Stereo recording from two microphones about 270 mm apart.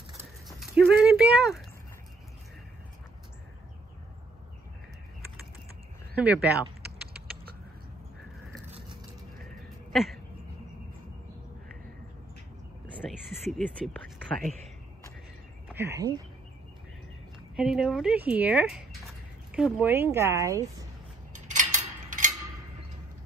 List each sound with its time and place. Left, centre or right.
0.6 s a sound: centre
6.1 s speech: centre
13.3 s speech: centre
15.7 s speech: centre
17.6 s a woman's voice: centre
21.3 s a sound: right